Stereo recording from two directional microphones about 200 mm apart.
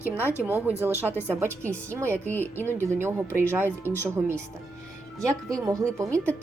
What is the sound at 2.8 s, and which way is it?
Speech, 10° right (ahead or behind).